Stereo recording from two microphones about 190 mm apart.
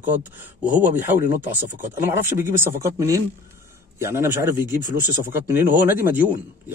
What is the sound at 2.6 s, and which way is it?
A man's voice, 15° right (ahead or behind).